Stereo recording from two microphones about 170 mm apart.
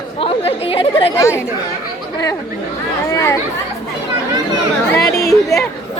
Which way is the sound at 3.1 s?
20° left (ahead or behind).